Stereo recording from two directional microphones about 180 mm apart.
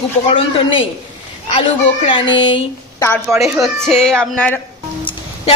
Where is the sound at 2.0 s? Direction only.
30° left (ahead or behind).